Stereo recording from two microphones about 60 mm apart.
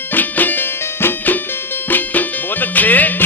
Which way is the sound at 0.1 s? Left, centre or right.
Left.